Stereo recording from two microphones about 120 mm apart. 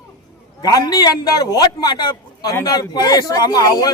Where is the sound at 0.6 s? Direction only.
35° left (ahead or behind).